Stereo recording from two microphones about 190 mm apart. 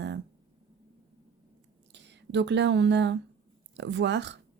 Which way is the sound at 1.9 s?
65° right (ahead or behind).